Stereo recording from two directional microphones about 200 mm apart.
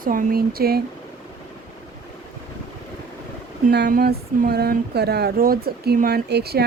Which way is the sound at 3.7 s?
55° right (ahead or behind).